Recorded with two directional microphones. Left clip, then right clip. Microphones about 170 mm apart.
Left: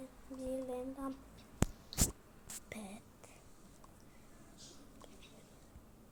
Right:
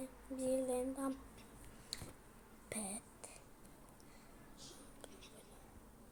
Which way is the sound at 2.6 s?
10° right (ahead or behind).